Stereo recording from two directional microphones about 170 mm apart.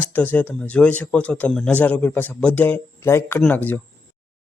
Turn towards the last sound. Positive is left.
turn(degrees=10)  # may be behind; listen again after turning